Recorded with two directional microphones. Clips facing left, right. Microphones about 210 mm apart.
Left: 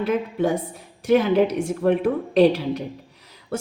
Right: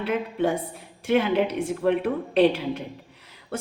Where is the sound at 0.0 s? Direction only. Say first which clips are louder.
Left 3 dB; 40° left (ahead or behind).